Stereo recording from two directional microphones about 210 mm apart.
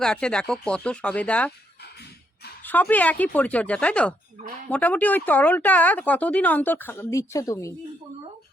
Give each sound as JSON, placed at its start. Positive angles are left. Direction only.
{"t": 0.0, "sound": "speech", "side_deg": 5}
{"t": 2.6, "sound": "speech", "side_deg": 10}